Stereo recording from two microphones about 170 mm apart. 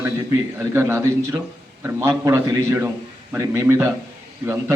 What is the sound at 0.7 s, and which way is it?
A man's voice, 15° right (ahead or behind).